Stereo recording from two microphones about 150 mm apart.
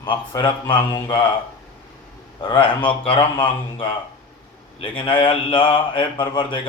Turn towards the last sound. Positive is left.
turn(degrees=35)  # may be behind; listen again after turning